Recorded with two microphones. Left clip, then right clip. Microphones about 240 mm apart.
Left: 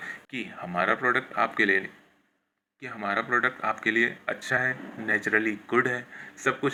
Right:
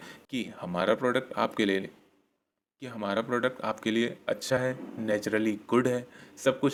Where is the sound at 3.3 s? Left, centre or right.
Right.